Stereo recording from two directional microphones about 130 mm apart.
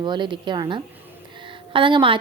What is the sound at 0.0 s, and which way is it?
Speech, 35° right (ahead or behind).